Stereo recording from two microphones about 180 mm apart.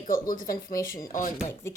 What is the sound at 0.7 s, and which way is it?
Speech, 15° left (ahead or behind).